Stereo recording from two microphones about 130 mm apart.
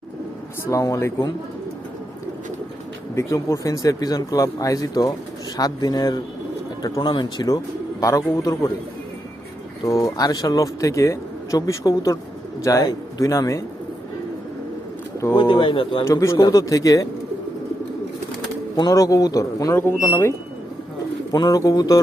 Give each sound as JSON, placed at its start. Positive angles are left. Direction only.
{"t": 0.7, "sound": "speech", "side_deg": 25}
{"t": 3.2, "sound": "speech", "side_deg": 25}
{"t": 9.8, "sound": "speech", "side_deg": 25}
{"t": 15.4, "sound": "speech", "side_deg": 40}
{"t": 16.0, "sound": "speech", "side_deg": 25}
{"t": 18.8, "sound": "speech", "side_deg": 25}
{"t": 21.3, "sound": "speech", "side_deg": 30}